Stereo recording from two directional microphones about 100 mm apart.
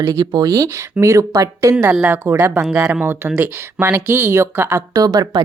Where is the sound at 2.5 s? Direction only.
10° right (ahead or behind).